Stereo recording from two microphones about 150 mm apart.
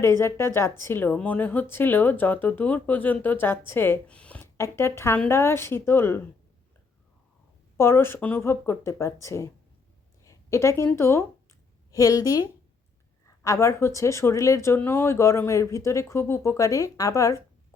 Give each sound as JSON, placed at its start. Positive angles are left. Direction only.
{"t": 0.0, "sound": "speech", "side_deg": 15}
{"t": 7.8, "sound": "speech", "side_deg": 15}
{"t": 10.2, "sound": "a sound", "side_deg": 20}
{"t": 10.8, "sound": "a woman's voice", "side_deg": 15}